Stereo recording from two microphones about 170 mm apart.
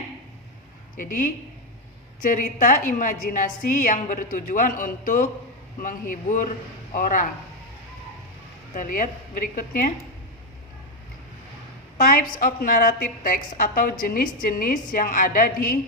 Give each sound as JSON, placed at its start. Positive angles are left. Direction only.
{"t": 0.9, "sound": "a woman's voice", "side_deg": 55}
{"t": 8.7, "sound": "speech", "side_deg": 55}
{"t": 11.9, "sound": "a woman's voice", "side_deg": 55}